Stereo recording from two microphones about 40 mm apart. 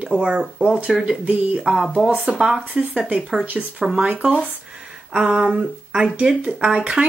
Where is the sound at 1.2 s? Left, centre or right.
Right.